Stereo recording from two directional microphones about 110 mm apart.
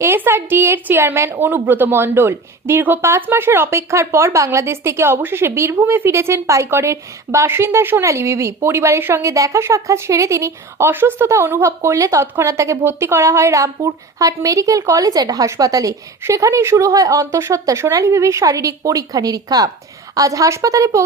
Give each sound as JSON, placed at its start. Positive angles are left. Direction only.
{"t": 0.0, "sound": "a woman's voice", "side_deg": -20}